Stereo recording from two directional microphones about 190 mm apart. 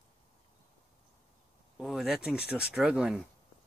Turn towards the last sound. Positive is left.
turn(degrees=-5)  # may be behind; listen again after turning